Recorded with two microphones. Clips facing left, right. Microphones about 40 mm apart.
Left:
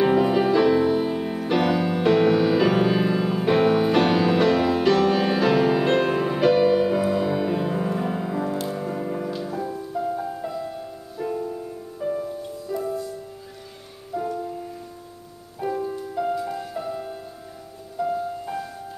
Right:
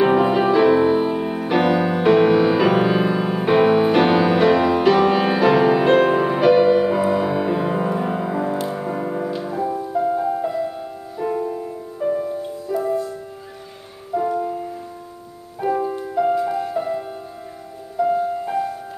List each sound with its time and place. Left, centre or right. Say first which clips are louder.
0.0 s music: right 3 dB; centre
14.1 s music: right 7 dB; right
15.6 s music: right 6 dB; right